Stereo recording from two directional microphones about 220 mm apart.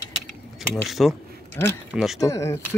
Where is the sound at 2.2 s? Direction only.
15° left (ahead or behind).